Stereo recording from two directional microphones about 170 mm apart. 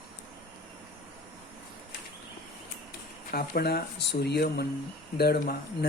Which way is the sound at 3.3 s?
65° left (ahead or behind).